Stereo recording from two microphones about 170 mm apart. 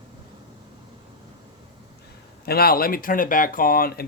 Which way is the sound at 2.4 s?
65° left (ahead or behind).